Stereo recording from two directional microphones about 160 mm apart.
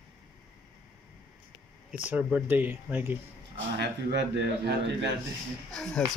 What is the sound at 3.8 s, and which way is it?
A man's voice, 90° right.